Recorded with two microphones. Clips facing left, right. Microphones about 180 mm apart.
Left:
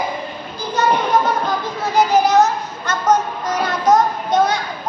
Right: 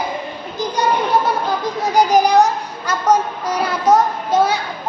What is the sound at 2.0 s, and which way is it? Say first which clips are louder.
A child's voice: right 1 dB; 15° right (ahead or behind).